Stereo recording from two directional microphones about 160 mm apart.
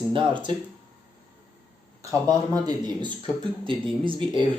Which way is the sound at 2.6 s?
25° right (ahead or behind).